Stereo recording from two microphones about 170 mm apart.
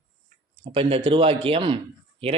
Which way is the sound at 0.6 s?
30° right (ahead or behind).